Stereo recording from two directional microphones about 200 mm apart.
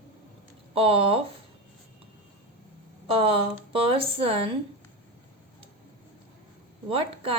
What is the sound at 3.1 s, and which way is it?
A woman's voice, 25° right (ahead or behind).